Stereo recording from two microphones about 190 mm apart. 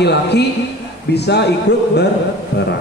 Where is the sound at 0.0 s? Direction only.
60° left (ahead or behind).